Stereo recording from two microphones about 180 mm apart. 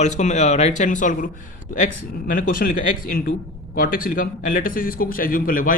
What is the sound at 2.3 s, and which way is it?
Speech, 50° left (ahead or behind).